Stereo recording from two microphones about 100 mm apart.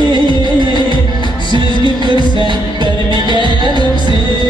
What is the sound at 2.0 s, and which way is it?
Music, 50° right (ahead or behind).